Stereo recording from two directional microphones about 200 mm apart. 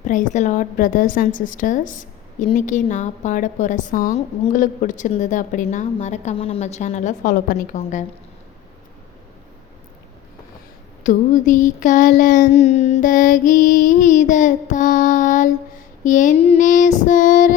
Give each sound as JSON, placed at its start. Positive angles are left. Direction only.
{"t": 0.0, "sound": "a woman's voice", "side_deg": 40}
{"t": 11.0, "sound": "a woman's voice", "side_deg": 40}